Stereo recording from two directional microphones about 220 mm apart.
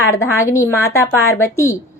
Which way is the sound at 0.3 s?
15° left (ahead or behind).